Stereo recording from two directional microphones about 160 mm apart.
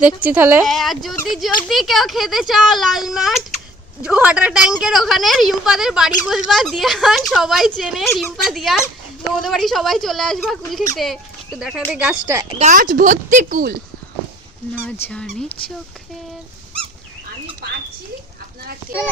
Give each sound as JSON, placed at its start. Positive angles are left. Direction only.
{"t": 0.0, "sound": "a woman's voice", "side_deg": -10}
{"t": 0.6, "sound": "a woman's voice", "side_deg": 0}
{"t": 12.2, "sound": "a woman's voice", "side_deg": -20}
{"t": 12.5, "sound": "speech", "side_deg": -50}
{"t": 15.1, "sound": "a woman's voice", "side_deg": 5}
{"t": 17.6, "sound": "speech", "side_deg": -80}